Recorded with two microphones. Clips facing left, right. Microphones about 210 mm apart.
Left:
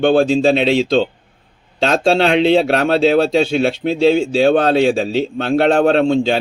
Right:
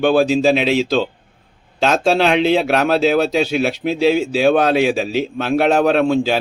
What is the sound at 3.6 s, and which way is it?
Speech, 5° right (ahead or behind).